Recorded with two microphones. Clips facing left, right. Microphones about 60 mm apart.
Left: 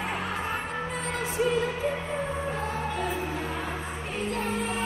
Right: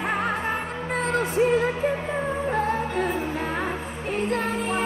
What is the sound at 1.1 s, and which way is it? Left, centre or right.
Music, right.